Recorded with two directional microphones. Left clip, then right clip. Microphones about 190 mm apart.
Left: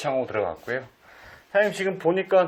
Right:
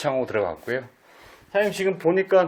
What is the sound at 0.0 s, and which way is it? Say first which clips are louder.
Speech: right 2 dB; 35° right (ahead or behind).